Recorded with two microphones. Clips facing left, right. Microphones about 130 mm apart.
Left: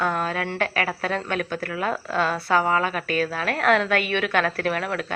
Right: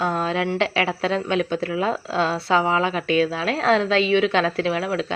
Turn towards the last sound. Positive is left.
turn(degrees=-20)  # may be behind; listen again after turning